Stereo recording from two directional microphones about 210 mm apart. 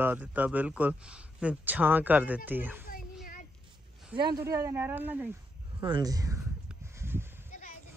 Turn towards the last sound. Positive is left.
turn(degrees=-10)  # may be behind; listen again after turning